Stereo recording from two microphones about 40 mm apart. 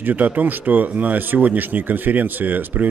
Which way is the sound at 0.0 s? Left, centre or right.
Right.